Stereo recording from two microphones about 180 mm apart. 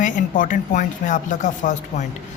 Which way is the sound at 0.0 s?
45° left (ahead or behind).